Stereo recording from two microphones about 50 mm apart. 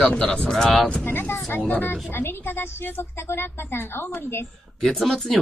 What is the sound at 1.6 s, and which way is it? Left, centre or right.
Speech, left.